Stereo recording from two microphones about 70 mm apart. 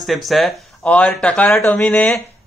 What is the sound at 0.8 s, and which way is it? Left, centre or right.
Speech, centre.